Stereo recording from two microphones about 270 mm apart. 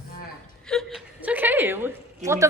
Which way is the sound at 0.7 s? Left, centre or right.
Centre.